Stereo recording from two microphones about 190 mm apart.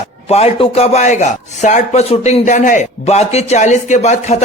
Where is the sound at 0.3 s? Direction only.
35° left (ahead or behind).